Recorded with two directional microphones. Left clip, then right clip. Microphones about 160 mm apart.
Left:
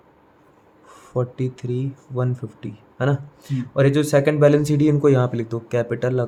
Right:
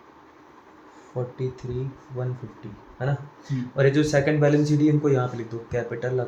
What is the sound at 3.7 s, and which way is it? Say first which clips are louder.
Speech: left 3 dB; 55° left (ahead or behind).